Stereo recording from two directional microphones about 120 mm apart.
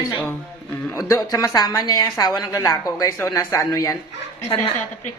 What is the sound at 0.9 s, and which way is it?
A woman's voice, 25° left (ahead or behind).